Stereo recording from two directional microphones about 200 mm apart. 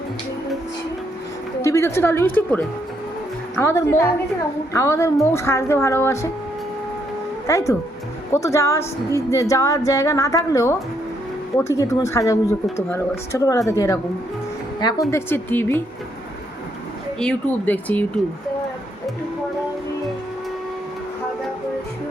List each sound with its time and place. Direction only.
1.6 s a woman's voice: 15° left (ahead or behind)
7.4 s a woman's voice: 15° left (ahead or behind)
15.1 s a woman's voice: 10° left (ahead or behind)
17.2 s a woman's voice: 5° left (ahead or behind)